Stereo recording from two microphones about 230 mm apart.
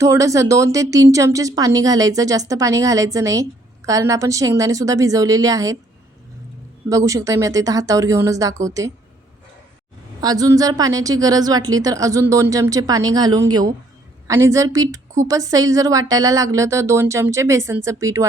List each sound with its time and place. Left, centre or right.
0.0 s a woman's voice: centre
6.9 s a woman's voice: centre
10.2 s a woman's voice: centre